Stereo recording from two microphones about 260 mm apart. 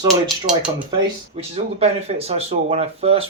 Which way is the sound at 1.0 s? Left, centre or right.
Right.